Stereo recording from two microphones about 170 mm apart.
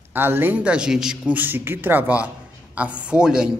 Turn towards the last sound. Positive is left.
turn(degrees=-5)  # may be behind; listen again after turning